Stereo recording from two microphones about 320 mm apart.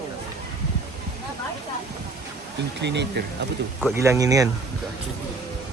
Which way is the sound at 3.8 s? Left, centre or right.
Centre.